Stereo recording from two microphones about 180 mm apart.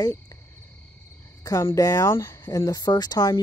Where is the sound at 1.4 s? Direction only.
20° left (ahead or behind).